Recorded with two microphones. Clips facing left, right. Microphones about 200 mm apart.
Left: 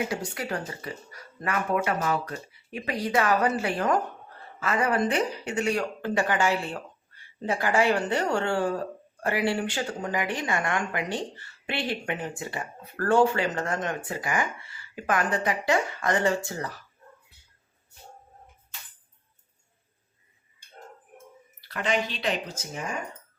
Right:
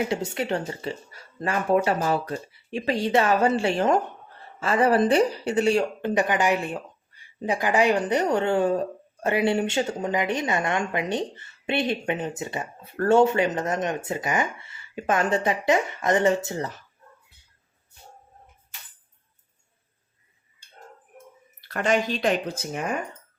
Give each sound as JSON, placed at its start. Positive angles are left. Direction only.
{"t": 0.1, "sound": "speech", "side_deg": -25}
{"t": 21.7, "sound": "speech", "side_deg": -45}